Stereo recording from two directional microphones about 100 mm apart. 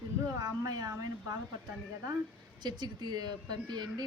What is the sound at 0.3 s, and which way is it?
Speech, 40° right (ahead or behind).